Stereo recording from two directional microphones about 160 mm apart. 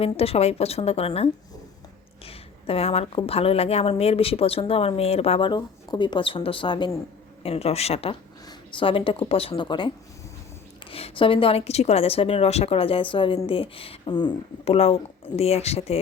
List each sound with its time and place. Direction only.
0.0 s a woman's voice: 40° left (ahead or behind)
10.9 s a woman's voice: 35° left (ahead or behind)
14.6 s a woman's voice: 40° left (ahead or behind)